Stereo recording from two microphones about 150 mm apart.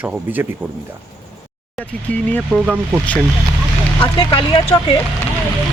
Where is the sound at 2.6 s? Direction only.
10° right (ahead or behind).